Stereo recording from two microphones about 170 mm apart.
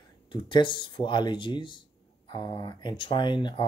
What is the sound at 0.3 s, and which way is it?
Speech, 30° left (ahead or behind).